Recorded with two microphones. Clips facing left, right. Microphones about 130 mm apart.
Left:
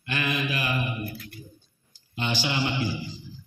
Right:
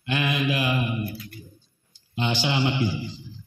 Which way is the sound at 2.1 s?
20° right (ahead or behind).